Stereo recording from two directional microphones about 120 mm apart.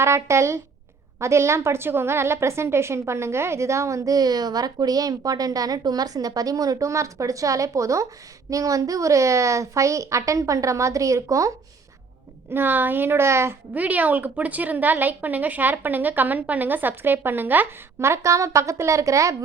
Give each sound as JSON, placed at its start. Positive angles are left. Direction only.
{"t": 0.0, "sound": "a woman's voice", "side_deg": -20}
{"t": 12.5, "sound": "a woman's voice", "side_deg": -15}